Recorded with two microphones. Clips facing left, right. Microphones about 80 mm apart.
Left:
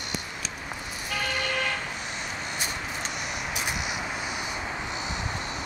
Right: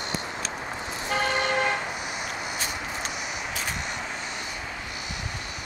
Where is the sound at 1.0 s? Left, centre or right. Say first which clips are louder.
Right 5 dB; right.